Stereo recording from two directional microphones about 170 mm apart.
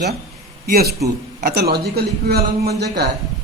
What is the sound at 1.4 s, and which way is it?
A man's voice, 65° right (ahead or behind).